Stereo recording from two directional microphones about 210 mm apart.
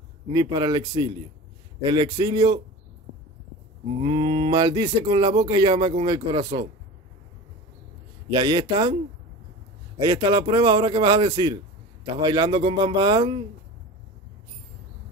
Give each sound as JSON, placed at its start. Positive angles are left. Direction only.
{"t": 0.3, "sound": "speech", "side_deg": -20}
{"t": 4.0, "sound": "speech", "side_deg": -30}
{"t": 8.3, "sound": "speech", "side_deg": -20}
{"t": 9.9, "sound": "speech", "side_deg": -20}